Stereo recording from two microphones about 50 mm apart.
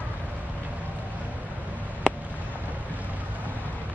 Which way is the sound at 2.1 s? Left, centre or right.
Centre.